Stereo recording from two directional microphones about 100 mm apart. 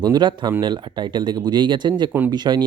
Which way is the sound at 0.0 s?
45° right (ahead or behind).